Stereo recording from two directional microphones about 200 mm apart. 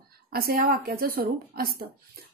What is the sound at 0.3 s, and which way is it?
A woman's voice, 50° right (ahead or behind).